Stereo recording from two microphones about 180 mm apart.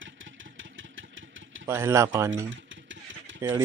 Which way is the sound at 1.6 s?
15° right (ahead or behind).